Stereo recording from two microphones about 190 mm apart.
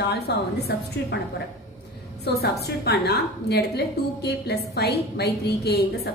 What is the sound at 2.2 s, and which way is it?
A woman's voice, 55° left (ahead or behind).